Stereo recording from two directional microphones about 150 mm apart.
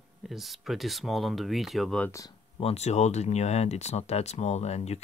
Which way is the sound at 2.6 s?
45° left (ahead or behind).